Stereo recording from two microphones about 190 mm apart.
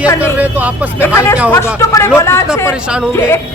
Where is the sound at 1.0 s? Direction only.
15° left (ahead or behind).